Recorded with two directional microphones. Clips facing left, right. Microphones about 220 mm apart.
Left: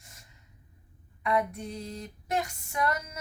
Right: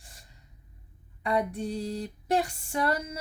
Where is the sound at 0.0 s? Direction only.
30° right (ahead or behind).